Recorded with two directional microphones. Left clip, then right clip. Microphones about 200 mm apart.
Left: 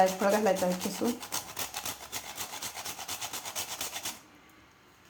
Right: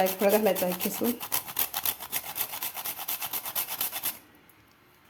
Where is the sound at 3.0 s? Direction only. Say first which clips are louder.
Right 1 dB; 20° right (ahead or behind).